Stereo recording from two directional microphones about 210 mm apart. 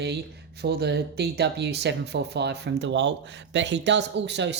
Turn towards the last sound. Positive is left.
turn(degrees=-55)  # may be behind; listen again after turning